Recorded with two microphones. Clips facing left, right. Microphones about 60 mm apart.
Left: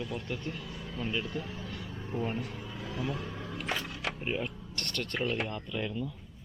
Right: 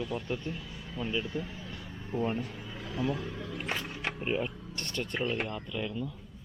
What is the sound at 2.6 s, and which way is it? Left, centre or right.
Speech, centre.